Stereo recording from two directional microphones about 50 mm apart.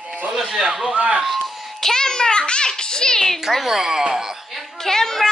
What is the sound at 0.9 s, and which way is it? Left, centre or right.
Speech, right.